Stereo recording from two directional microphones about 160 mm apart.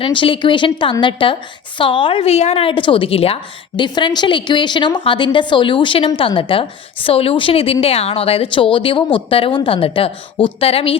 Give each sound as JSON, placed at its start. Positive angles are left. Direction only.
{"t": 0.0, "sound": "a woman's voice", "side_deg": 35}